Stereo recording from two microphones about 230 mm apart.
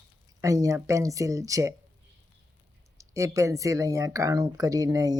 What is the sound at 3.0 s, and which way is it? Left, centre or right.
Speech, centre.